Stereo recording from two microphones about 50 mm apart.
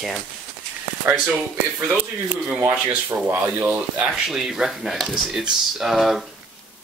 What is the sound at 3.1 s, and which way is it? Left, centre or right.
Speech, right.